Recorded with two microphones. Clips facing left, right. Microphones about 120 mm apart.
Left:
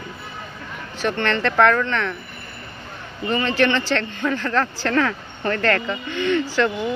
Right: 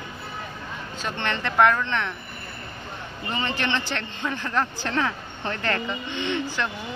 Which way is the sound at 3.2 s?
20° right (ahead or behind).